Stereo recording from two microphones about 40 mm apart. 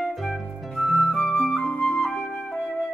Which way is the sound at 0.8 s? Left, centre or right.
Centre.